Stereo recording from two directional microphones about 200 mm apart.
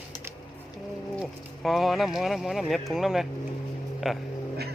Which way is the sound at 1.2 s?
Centre (ahead or behind).